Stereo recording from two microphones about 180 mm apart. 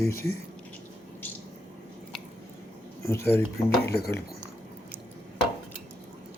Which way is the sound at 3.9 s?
60° left (ahead or behind).